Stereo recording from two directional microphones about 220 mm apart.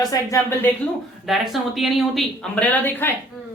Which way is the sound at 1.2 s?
Centre (ahead or behind).